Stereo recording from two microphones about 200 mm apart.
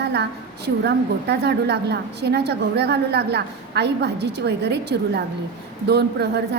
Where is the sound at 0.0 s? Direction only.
55° right (ahead or behind).